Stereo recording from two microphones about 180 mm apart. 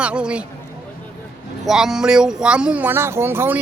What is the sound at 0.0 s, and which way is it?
Speech, 5° right (ahead or behind).